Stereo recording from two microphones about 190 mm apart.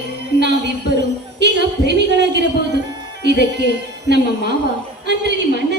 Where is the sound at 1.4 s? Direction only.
65° right (ahead or behind).